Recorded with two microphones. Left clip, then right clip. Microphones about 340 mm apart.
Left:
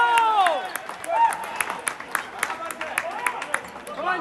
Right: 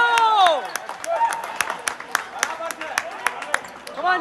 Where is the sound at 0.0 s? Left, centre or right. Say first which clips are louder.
Right 3 dB; right.